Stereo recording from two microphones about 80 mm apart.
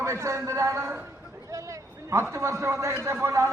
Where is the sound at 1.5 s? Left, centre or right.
Right.